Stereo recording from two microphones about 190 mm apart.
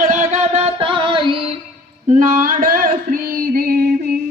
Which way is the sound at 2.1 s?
45° right (ahead or behind).